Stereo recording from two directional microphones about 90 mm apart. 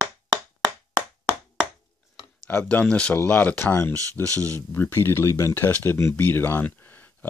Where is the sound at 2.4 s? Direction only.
15° left (ahead or behind).